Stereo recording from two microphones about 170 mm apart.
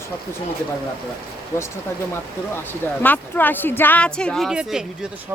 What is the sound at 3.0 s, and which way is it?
Speech, 10° left (ahead or behind).